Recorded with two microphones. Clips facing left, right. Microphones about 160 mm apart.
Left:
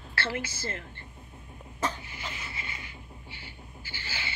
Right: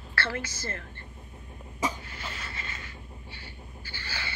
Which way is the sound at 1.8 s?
10° right (ahead or behind).